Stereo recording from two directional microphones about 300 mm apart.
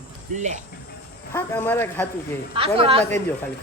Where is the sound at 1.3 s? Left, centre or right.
Centre.